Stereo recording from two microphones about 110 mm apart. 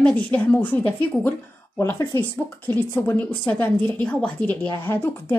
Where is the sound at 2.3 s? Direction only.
15° left (ahead or behind).